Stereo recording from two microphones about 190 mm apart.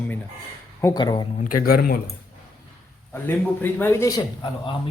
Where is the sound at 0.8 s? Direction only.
20° left (ahead or behind).